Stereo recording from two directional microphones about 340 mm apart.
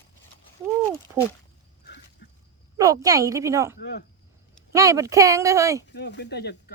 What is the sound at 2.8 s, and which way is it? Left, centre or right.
Speech, centre.